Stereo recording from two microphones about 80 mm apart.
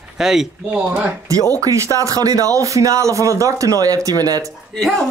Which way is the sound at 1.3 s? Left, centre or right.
Right.